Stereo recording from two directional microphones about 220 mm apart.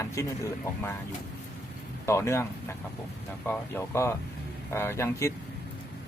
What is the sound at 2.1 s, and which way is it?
Speech, 10° left (ahead or behind).